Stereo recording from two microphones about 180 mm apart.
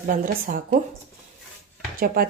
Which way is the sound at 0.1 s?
50° right (ahead or behind).